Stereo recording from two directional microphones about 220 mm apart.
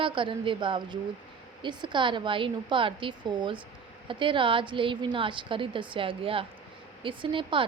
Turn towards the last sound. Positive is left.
turn(degrees=-20)  # may be behind; listen again after turning